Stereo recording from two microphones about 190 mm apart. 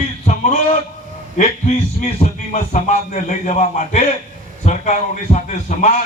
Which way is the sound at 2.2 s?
40° left (ahead or behind).